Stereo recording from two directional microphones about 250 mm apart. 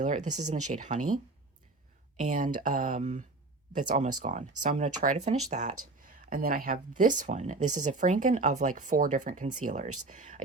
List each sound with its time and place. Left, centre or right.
0.0 s speech: right
2.2 s speech: right